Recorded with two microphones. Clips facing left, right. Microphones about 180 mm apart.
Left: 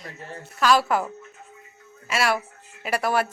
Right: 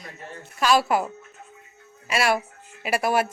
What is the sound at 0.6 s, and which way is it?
Speech, 15° right (ahead or behind).